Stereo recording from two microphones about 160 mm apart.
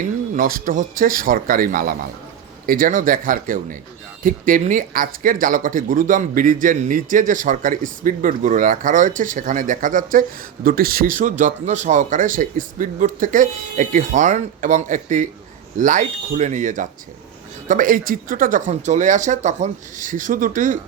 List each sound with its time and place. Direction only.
0.3 s speech: 65° right (ahead or behind)